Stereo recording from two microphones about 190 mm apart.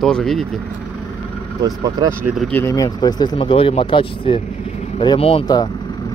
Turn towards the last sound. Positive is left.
turn(degrees=25)  # may be behind; listen again after turning